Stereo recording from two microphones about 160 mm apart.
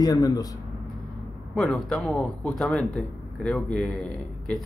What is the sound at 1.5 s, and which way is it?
Speech, centre (ahead or behind).